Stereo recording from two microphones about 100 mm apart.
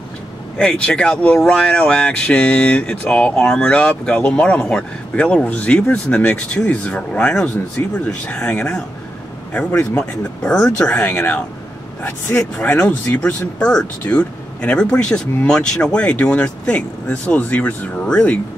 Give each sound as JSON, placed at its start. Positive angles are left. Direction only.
{"t": 0.6, "sound": "speech", "side_deg": 10}
{"t": 12.7, "sound": "speech", "side_deg": 10}